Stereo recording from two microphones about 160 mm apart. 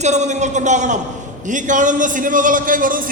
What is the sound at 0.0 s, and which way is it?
A man's voice, 45° right (ahead or behind).